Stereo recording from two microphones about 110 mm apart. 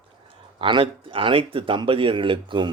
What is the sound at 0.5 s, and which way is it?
Speech, 50° right (ahead or behind).